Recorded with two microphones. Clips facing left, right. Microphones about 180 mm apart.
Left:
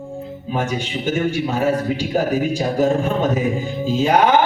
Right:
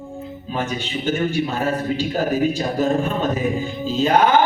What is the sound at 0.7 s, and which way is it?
A man's voice, 15° left (ahead or behind).